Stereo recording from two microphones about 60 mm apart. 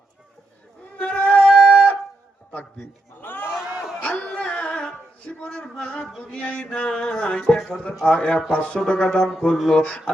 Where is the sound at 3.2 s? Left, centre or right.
Left.